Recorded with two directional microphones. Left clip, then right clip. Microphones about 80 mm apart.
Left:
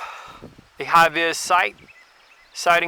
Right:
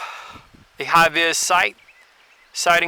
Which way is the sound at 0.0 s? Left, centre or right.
Right.